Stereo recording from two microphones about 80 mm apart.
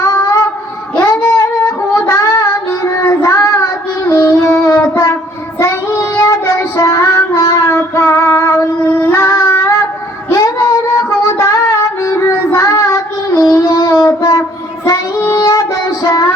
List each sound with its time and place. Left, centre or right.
0.0 s a sound: left
2.0 s child singing: left
10.2 s music: left
14.8 s child singing: left